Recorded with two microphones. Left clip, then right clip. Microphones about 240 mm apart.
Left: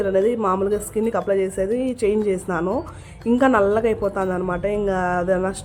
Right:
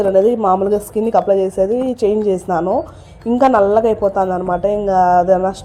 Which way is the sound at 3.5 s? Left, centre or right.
Centre.